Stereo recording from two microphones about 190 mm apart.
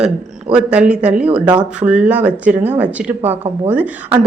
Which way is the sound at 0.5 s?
5° right (ahead or behind).